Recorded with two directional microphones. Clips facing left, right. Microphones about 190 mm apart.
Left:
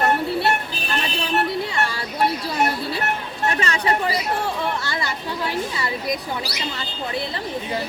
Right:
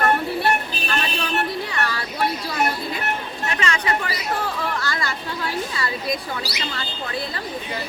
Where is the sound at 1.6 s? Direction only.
25° left (ahead or behind).